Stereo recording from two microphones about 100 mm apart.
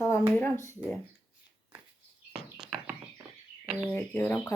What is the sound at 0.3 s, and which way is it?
Speech, 25° left (ahead or behind).